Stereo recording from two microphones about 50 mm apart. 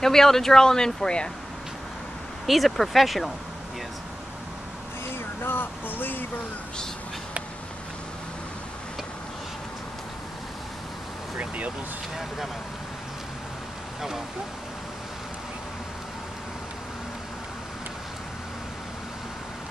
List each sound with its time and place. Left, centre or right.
0.0 s speech: centre
2.4 s speech: centre
5.4 s a sound: left
11.3 s vehicle: right